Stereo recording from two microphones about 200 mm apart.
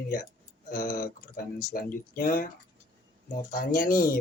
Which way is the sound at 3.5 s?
45° left (ahead or behind).